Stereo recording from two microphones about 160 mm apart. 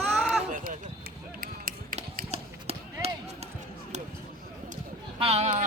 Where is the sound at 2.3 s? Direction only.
40° right (ahead or behind).